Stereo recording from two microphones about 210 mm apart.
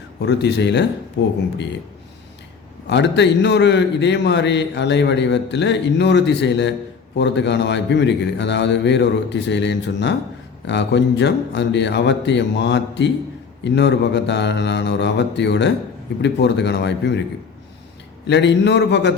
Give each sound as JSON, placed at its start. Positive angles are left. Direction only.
{"t": 0.2, "sound": "a man's voice", "side_deg": 55}
{"t": 2.9, "sound": "a man's voice", "side_deg": 55}
{"t": 18.3, "sound": "a man's voice", "side_deg": 55}